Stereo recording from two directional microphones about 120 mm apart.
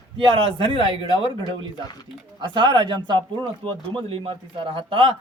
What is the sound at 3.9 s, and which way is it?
Speech, 50° right (ahead or behind).